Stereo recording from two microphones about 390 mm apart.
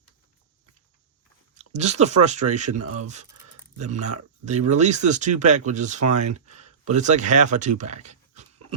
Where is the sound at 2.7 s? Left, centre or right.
Right.